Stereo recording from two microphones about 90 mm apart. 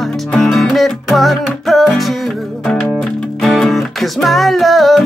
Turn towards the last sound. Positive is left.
turn(degrees=0)  # may be behind; listen again after turning